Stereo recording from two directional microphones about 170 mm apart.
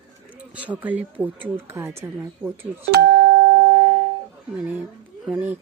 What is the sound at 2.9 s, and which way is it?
Music, 75° right (ahead or behind).